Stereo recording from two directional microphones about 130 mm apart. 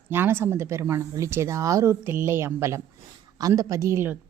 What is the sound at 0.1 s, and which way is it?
A woman's voice, 15° right (ahead or behind).